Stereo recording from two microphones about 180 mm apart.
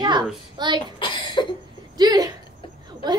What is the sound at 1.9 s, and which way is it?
Speech, 20° right (ahead or behind).